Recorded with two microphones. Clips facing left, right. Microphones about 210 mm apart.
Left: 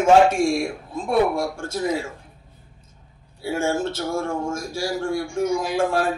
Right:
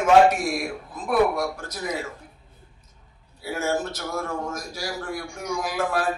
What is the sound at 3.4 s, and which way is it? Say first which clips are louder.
Speech: left 3 dB; 25° left (ahead or behind).